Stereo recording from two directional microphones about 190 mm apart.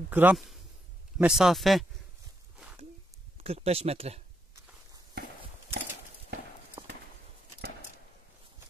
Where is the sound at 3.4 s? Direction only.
35° right (ahead or behind).